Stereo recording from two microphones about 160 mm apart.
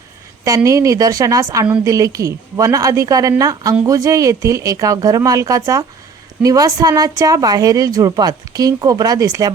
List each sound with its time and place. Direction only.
0.4 s speech: 20° right (ahead or behind)